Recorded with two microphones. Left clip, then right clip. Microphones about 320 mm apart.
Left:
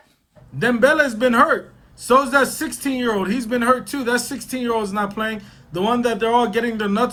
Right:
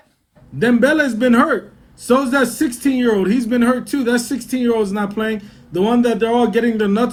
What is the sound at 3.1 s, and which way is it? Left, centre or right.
Speech, right.